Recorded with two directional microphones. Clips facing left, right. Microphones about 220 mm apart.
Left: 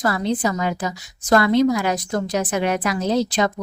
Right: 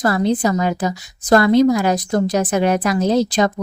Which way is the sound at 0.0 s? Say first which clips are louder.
Right 4 dB; 40° right (ahead or behind).